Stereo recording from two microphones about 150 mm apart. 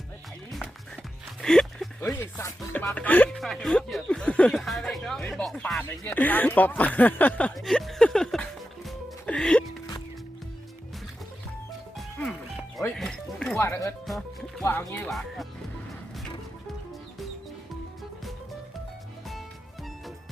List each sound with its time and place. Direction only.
1.4 s a sound: 5° left (ahead or behind)
2.1 s speech: 15° left (ahead or behind)
3.3 s speech: centre (ahead or behind)
6.1 s a sound: 10° left (ahead or behind)
13.0 s music: 5° left (ahead or behind)
13.6 s music: 20° left (ahead or behind)
14.6 s speech: 20° left (ahead or behind)